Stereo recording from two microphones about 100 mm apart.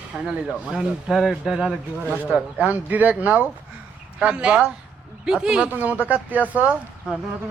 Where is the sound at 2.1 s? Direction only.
15° right (ahead or behind).